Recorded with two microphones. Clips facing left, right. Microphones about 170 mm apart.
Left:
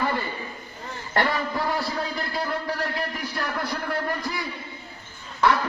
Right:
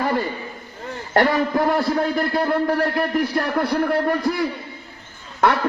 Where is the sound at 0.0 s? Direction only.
45° right (ahead or behind).